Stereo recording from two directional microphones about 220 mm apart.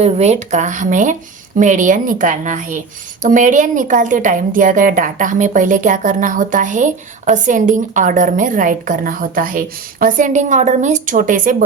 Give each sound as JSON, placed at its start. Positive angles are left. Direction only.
{"t": 0.0, "sound": "a woman's voice", "side_deg": -30}